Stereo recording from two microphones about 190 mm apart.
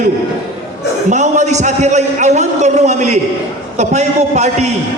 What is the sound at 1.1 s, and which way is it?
A man's voice, 40° right (ahead or behind).